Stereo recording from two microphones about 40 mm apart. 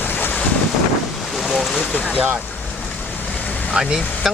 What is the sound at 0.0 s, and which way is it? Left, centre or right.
Boat, left.